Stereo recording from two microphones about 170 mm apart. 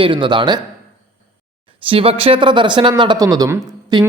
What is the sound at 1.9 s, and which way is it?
Speech, 35° right (ahead or behind).